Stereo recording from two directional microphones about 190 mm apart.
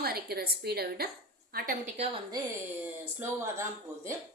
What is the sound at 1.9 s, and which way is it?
Speech, 30° right (ahead or behind).